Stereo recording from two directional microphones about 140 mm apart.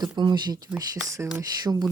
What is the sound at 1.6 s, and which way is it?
Speech, 30° right (ahead or behind).